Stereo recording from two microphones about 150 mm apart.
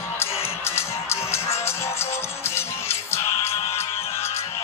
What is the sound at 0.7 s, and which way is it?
Music, 15° left (ahead or behind).